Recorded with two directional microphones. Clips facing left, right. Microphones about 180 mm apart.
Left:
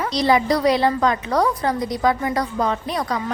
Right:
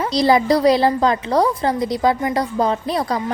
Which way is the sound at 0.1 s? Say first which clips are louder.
Right 3 dB; 35° right (ahead or behind).